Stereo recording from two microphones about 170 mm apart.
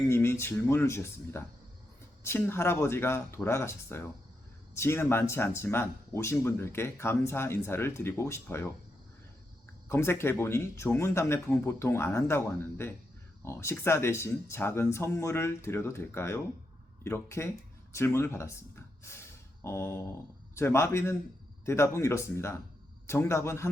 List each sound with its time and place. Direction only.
0.1 s speech: 15° left (ahead or behind)
9.9 s speech: 15° left (ahead or behind)
19.6 s speech: 15° left (ahead or behind)